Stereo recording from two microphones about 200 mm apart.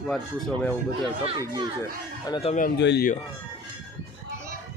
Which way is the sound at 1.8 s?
20° left (ahead or behind).